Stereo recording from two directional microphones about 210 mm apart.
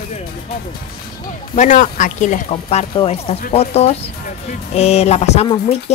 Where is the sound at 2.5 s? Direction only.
25° left (ahead or behind).